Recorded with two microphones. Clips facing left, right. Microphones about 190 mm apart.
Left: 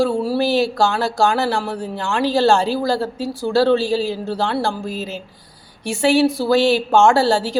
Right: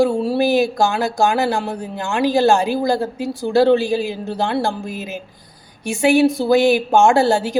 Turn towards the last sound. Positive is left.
turn(degrees=-20)  # may be behind; listen again after turning